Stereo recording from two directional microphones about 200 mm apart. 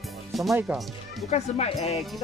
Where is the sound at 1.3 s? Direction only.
30° left (ahead or behind).